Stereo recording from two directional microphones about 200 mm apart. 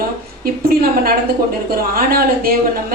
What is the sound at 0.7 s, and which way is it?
A woman's voice, 50° right (ahead or behind).